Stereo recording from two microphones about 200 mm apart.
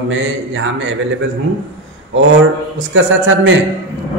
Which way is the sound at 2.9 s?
70° right (ahead or behind).